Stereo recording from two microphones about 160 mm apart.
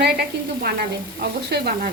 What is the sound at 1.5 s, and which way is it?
Sizzle, 90° right.